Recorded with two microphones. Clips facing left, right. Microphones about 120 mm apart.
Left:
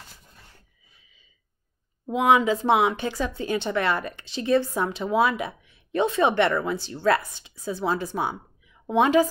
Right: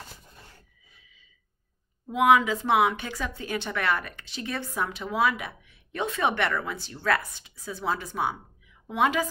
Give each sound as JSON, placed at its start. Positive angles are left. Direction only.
{"t": 2.0, "sound": "a woman's voice", "side_deg": 30}